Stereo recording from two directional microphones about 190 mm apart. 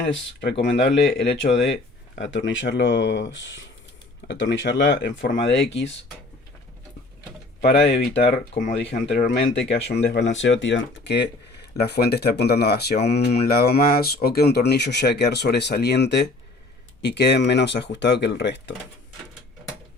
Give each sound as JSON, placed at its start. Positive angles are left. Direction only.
{"t": 0.3, "sound": "speech", "side_deg": 65}
{"t": 7.6, "sound": "speech", "side_deg": 65}